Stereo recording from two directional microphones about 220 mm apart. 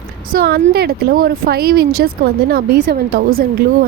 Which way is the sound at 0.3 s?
45° right (ahead or behind).